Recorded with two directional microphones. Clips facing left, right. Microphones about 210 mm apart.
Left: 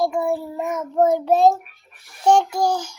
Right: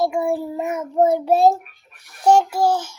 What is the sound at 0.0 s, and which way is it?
A child's voice, 10° right (ahead or behind).